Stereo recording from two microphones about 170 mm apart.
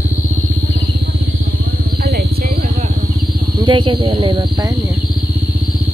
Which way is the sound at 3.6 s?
30° right (ahead or behind).